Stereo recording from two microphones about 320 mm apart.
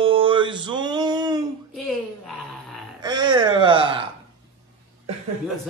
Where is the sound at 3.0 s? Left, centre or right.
Centre.